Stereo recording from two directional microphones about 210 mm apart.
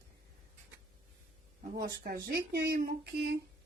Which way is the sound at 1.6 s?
45° right (ahead or behind).